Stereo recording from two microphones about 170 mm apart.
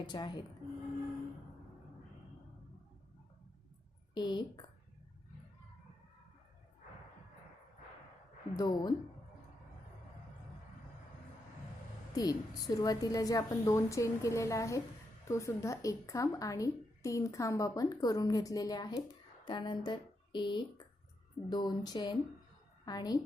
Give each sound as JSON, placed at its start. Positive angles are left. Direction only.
{"t": 0.0, "sound": "speech", "side_deg": 25}
{"t": 4.1, "sound": "speech", "side_deg": 25}
{"t": 8.5, "sound": "speech", "side_deg": 25}
{"t": 12.1, "sound": "speech", "side_deg": 20}